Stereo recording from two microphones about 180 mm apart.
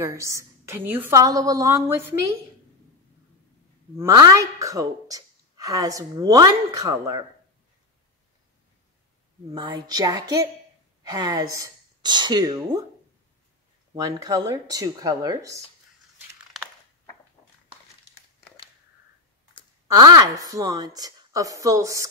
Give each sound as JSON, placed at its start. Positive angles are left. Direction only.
{"t": 0.0, "sound": "a woman's voice", "side_deg": -15}
{"t": 4.0, "sound": "a woman's voice", "side_deg": -20}
{"t": 9.5, "sound": "a woman's voice", "side_deg": -25}
{"t": 13.9, "sound": "a woman's voice", "side_deg": -20}
{"t": 20.0, "sound": "a woman's voice", "side_deg": -20}